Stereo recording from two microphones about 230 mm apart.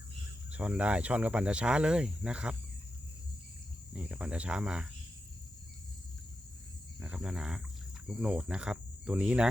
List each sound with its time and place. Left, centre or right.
0.5 s speech: centre
3.9 s speech: centre
7.0 s speech: centre